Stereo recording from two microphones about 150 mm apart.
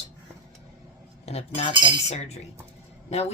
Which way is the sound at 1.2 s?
45° left (ahead or behind).